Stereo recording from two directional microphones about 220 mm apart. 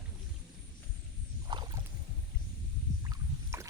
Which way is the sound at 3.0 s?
15° right (ahead or behind).